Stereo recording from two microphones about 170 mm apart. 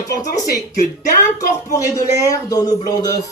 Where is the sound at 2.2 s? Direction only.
20° left (ahead or behind).